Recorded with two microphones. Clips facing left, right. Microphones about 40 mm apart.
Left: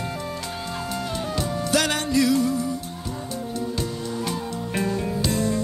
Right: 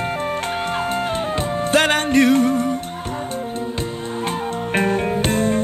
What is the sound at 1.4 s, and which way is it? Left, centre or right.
Music, right.